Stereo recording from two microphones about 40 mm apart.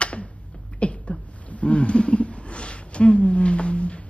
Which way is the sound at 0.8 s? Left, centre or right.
Left.